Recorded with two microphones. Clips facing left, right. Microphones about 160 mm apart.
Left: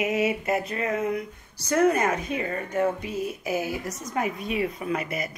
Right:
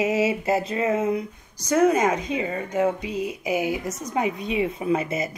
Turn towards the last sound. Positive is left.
turn(degrees=-25)  # may be behind; listen again after turning